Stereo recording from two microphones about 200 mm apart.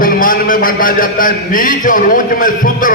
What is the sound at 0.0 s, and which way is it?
A man's voice, 45° left (ahead or behind).